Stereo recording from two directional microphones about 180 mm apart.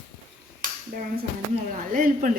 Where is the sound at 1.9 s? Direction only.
50° right (ahead or behind).